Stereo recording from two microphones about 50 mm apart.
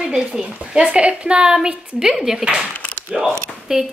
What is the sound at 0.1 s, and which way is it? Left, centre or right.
A woman's voice, centre.